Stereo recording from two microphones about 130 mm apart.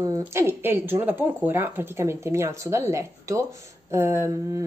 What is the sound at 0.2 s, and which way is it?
Speech, 20° right (ahead or behind).